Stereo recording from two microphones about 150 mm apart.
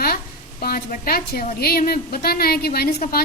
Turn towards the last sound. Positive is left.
turn(degrees=90)